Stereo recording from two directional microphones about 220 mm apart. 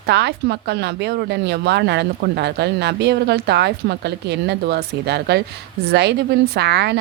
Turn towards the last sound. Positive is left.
turn(degrees=-50)  # may be behind; listen again after turning